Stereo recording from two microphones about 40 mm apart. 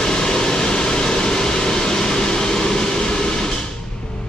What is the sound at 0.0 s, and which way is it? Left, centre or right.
Vehicle, centre.